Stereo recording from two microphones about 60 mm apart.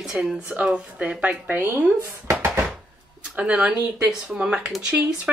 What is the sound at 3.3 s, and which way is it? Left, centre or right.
Speech, right.